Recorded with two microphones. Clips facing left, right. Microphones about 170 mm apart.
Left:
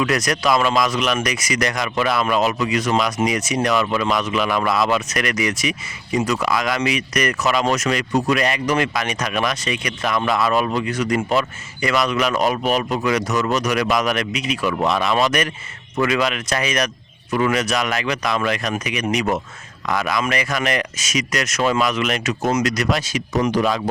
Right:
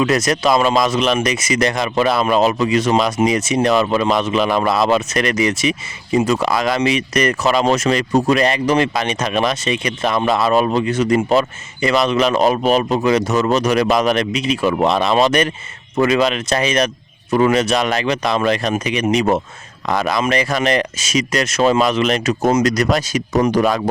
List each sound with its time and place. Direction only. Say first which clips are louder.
0.0 s speech: right 4 dB; 25° right (ahead or behind); by 23.9 s 45° right (ahead or behind)